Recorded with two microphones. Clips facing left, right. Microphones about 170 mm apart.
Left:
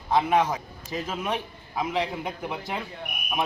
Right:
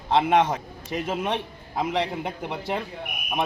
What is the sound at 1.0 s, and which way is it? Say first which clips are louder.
Speech: right 3 dB; 30° right (ahead or behind).